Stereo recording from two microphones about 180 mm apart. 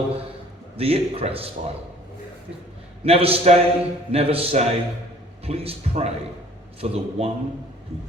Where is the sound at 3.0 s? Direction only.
30° right (ahead or behind).